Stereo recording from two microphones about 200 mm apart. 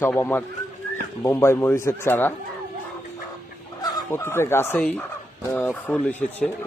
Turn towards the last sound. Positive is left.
turn(degrees=5)  # may be behind; listen again after turning